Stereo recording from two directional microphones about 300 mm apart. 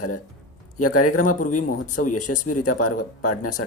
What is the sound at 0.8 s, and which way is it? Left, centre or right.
Speech, left.